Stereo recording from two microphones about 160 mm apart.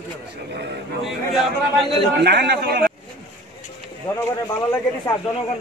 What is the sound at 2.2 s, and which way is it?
Speech, 90° right.